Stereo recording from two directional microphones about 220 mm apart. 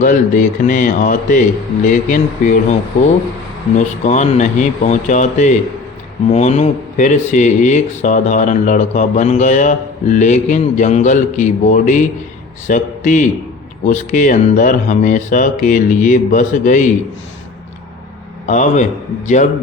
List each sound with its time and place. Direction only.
0.0 s speech: 35° left (ahead or behind)
3.8 s speech: 35° left (ahead or behind)
18.4 s speech: 35° left (ahead or behind)